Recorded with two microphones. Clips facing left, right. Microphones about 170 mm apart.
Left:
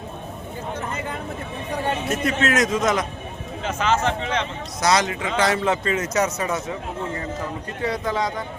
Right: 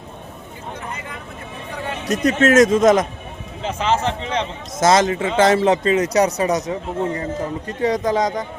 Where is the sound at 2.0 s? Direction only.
40° right (ahead or behind).